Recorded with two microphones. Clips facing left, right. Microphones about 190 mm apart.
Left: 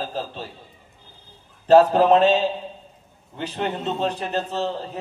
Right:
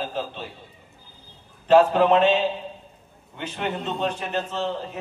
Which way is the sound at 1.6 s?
40° left (ahead or behind).